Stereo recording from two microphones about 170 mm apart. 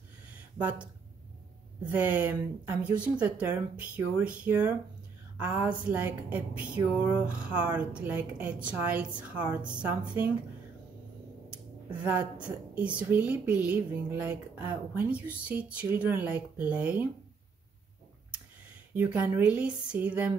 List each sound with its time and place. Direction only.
0.6 s a woman's voice: 10° right (ahead or behind)
1.9 s a woman's voice: 10° right (ahead or behind)
11.9 s a woman's voice: 10° right (ahead or behind)
18.9 s a woman's voice: 10° right (ahead or behind)